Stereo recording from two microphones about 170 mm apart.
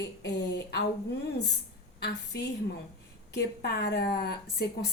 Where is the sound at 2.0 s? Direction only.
90° left.